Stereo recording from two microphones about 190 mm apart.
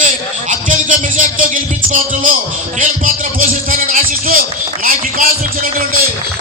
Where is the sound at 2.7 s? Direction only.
45° right (ahead or behind).